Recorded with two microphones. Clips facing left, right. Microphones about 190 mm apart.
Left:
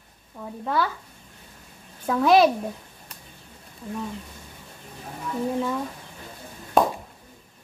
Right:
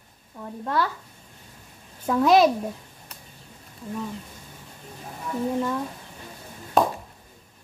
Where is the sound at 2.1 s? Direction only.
Centre (ahead or behind).